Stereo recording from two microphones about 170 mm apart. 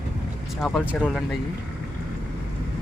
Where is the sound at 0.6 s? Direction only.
Centre (ahead or behind).